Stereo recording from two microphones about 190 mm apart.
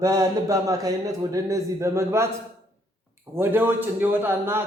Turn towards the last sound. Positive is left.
turn(degrees=-10)  # may be behind; listen again after turning